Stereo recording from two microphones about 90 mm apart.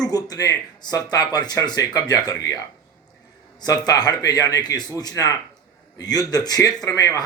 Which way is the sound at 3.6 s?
45° left (ahead or behind).